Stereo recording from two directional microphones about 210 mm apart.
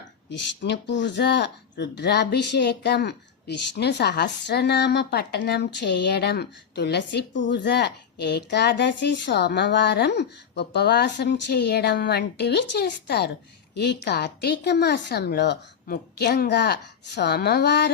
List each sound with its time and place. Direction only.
0.3 s speech: 60° left (ahead or behind)